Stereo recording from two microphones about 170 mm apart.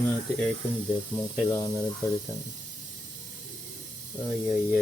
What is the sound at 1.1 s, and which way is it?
Speech, 20° left (ahead or behind).